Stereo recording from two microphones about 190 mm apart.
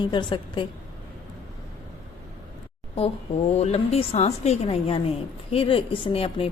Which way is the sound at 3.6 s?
35° left (ahead or behind).